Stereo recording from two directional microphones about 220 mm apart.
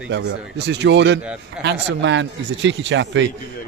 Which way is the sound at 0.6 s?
50° right (ahead or behind).